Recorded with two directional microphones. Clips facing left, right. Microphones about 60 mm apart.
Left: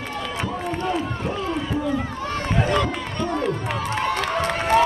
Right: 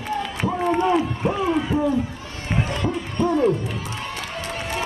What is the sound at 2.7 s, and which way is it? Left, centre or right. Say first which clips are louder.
Run: left 1 dB; left.